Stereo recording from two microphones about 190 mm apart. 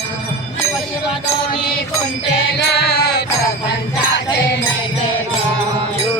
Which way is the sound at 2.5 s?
60° left (ahead or behind).